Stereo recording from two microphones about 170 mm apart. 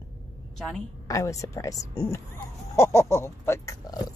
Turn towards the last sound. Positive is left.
turn(degrees=20)  # may be behind; listen again after turning